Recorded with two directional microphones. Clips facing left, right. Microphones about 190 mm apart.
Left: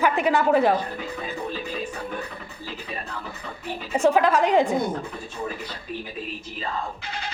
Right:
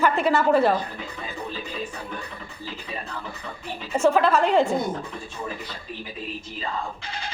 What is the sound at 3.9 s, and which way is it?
Speech, 15° left (ahead or behind).